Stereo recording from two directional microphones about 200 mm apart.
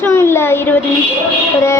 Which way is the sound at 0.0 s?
10° left (ahead or behind).